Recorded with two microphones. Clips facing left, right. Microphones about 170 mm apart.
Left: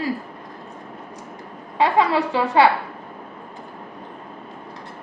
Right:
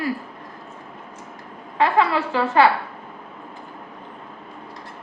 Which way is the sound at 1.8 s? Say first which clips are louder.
Left 1 dB; 15° left (ahead or behind).